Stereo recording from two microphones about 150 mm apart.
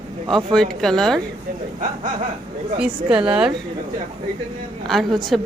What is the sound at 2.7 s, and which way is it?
Speech, 5° right (ahead or behind).